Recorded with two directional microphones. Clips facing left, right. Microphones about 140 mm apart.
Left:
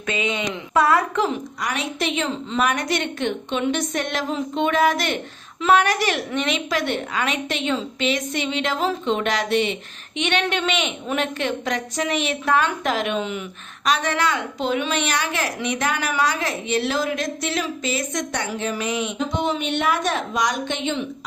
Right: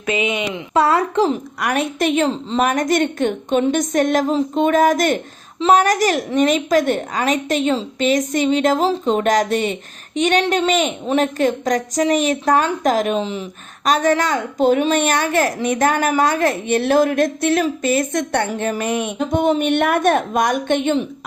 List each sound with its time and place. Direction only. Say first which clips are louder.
0.0 s speech: right 4 dB; 20° right (ahead or behind)
0.8 s a woman's voice: right 3 dB; 30° right (ahead or behind)
1.5 s a child's voice: right 6 dB; 55° right (ahead or behind); by 13.4 s 30° right (ahead or behind)
13.8 s a child's voice: right 5 dB; 45° right (ahead or behind)